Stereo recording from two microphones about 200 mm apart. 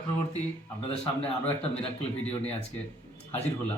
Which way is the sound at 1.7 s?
30° left (ahead or behind).